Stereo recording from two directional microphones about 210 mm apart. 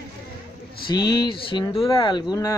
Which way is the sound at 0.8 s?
20° left (ahead or behind).